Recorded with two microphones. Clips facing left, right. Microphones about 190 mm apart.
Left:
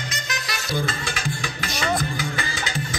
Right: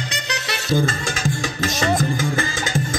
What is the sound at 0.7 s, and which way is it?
Music, 45° right (ahead or behind).